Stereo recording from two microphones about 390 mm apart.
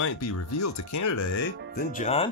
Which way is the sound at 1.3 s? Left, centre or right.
Left.